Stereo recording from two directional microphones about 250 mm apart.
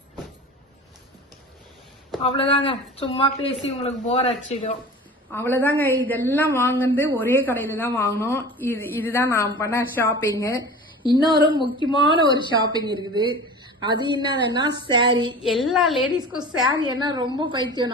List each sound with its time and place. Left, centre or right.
2.2 s speech: left
5.3 s speech: centre
11.0 s speech: centre
12.3 s a woman's voice: centre
14.9 s a sound: centre
15.6 s a woman's voice: centre
16.6 s a sound: centre
17.0 s a woman's voice: centre